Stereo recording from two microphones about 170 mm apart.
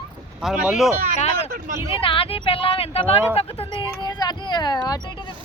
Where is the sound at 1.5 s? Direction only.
50° right (ahead or behind).